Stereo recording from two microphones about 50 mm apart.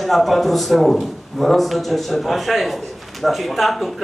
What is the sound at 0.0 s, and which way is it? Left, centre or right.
A man's voice, centre.